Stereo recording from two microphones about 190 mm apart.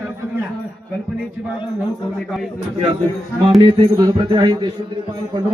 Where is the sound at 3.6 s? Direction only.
25° right (ahead or behind).